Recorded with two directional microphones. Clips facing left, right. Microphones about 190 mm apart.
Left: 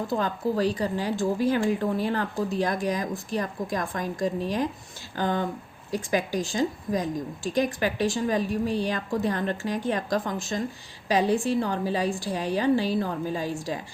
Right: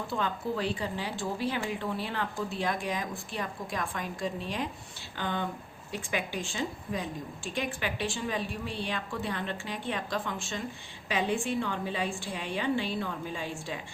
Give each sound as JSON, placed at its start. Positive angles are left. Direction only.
{"t": 0.1, "sound": "a woman's voice", "side_deg": 40}